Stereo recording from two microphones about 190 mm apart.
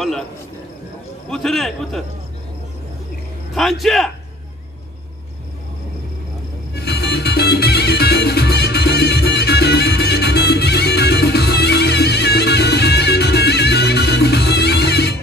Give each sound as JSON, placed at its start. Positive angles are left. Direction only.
{"t": 1.3, "sound": "a man's voice", "side_deg": 0}
{"t": 3.5, "sound": "a man's voice", "side_deg": 0}
{"t": 6.7, "sound": "music", "side_deg": 60}